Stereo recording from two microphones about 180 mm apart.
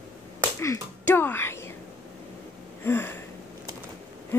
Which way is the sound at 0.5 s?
15° left (ahead or behind).